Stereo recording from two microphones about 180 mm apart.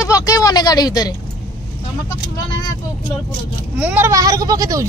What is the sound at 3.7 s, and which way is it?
A child's voice, 10° right (ahead or behind).